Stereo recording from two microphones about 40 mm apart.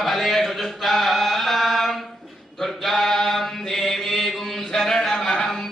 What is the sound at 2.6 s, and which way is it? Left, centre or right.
Chant, centre.